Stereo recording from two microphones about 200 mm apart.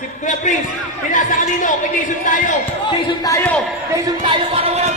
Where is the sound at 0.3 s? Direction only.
40° left (ahead or behind).